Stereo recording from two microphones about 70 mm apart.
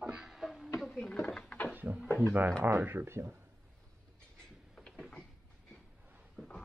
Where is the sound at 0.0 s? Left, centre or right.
Centre.